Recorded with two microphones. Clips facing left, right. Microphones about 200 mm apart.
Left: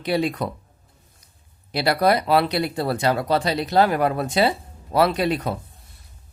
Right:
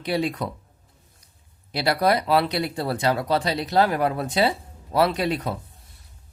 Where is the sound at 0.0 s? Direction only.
60° left (ahead or behind).